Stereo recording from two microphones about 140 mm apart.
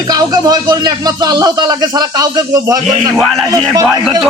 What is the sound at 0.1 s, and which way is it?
Speech, 30° right (ahead or behind).